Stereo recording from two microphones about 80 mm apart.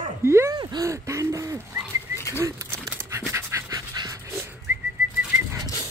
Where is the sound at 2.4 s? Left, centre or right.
Right.